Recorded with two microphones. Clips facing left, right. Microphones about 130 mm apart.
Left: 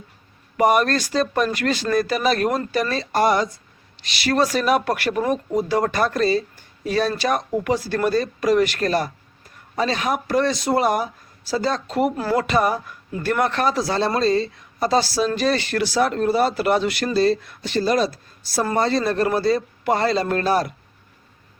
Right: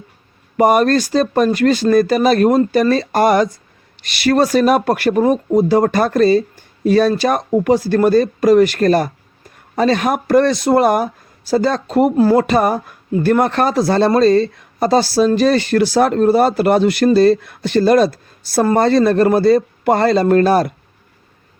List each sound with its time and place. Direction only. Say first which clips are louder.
0.5 s speech: right 6 dB; 40° right (ahead or behind)